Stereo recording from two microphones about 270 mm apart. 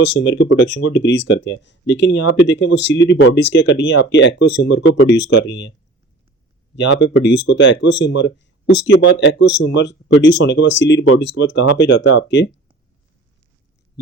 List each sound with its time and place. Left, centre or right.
0.0 s speech: left
6.7 s speech: left